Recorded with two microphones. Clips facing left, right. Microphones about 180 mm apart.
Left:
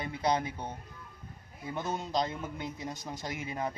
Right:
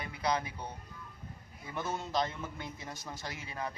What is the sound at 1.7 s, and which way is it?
Speech, 15° left (ahead or behind).